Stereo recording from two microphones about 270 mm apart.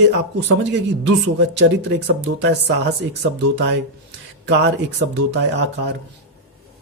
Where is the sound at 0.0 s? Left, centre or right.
Right.